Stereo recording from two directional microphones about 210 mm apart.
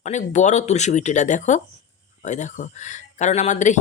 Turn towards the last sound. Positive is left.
turn(degrees=35)  # may be behind; listen again after turning